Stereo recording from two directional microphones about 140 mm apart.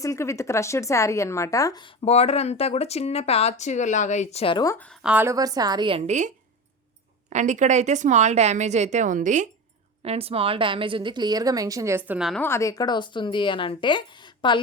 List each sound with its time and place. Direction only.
0.0 s speech: 20° left (ahead or behind)
2.1 s speech: 50° left (ahead or behind)
4.5 s speech: 25° left (ahead or behind)
5.0 s a woman's voice: 10° right (ahead or behind)
5.3 s a woman's voice: 25° right (ahead or behind)
6.1 s speech: 60° right (ahead or behind)
10.0 s a woman's voice: 45° right (ahead or behind); by 12.3 s 10° right (ahead or behind)
12.4 s a woman's voice: 20° left (ahead or behind)